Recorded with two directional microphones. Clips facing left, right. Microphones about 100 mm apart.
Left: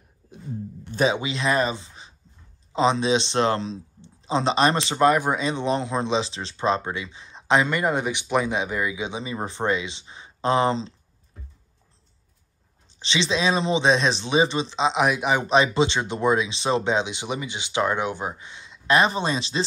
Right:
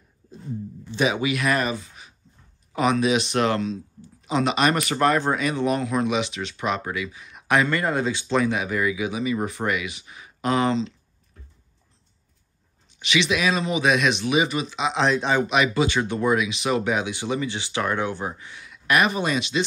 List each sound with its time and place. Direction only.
0.9 s speech: 25° left (ahead or behind)
12.8 s speech: 30° left (ahead or behind)
15.0 s speech: 10° left (ahead or behind)
15.4 s speech: 30° left (ahead or behind)